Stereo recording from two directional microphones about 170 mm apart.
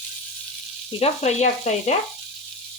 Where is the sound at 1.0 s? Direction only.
40° left (ahead or behind).